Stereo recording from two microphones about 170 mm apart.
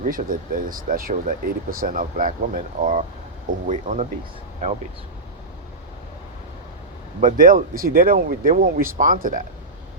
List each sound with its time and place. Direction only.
0.0 s speech: 55° right (ahead or behind)
7.2 s speech: 50° right (ahead or behind)